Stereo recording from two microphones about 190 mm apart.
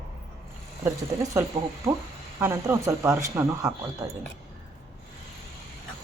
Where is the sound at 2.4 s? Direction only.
15° right (ahead or behind).